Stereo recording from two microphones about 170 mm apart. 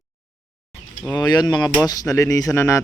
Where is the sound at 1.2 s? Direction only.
25° left (ahead or behind).